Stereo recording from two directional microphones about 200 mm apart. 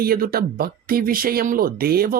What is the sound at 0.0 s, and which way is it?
Speech, 50° right (ahead or behind).